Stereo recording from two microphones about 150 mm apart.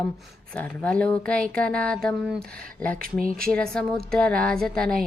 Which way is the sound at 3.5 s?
5° left (ahead or behind).